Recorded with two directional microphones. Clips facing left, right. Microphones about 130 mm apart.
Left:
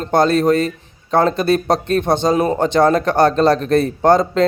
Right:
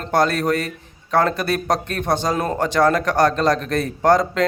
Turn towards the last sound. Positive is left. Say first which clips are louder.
# left 3 dB
turn(degrees=25)  # may be behind; listen again after turning